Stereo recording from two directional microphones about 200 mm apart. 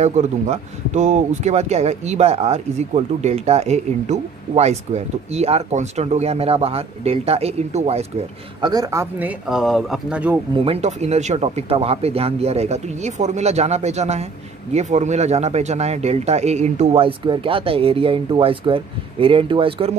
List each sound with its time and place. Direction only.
0.0 s speech: 35° right (ahead or behind)
8.5 s speech: 20° right (ahead or behind); by 10.3 s 5° right (ahead or behind)
10.6 s speech: 30° right (ahead or behind)